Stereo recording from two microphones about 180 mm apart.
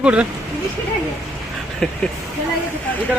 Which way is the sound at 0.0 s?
5° right (ahead or behind).